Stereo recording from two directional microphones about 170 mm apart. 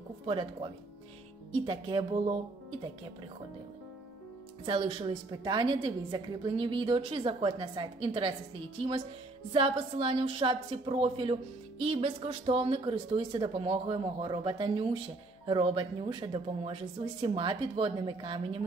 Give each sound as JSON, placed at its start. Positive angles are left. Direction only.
{"t": 0.3, "sound": "a woman's voice", "side_deg": -30}
{"t": 1.7, "sound": "a woman's voice", "side_deg": -25}
{"t": 4.6, "sound": "a woman's voice", "side_deg": -30}
{"t": 9.5, "sound": "a woman's voice", "side_deg": -30}